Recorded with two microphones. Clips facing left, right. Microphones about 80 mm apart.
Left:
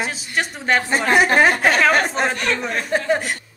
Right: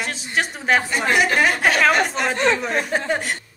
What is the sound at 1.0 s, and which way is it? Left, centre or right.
Speech, left.